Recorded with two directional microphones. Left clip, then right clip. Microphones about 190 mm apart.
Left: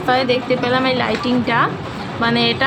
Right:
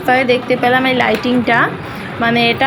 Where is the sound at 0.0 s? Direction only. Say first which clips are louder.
Right 4 dB; 15° right (ahead or behind).